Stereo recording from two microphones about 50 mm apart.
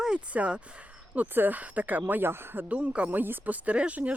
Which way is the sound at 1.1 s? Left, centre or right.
Right.